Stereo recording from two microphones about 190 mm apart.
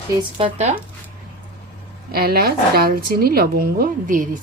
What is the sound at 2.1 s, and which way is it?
A woman's voice, 55° right (ahead or behind).